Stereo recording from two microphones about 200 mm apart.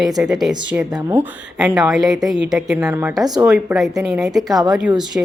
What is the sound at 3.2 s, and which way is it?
Speech, 20° right (ahead or behind).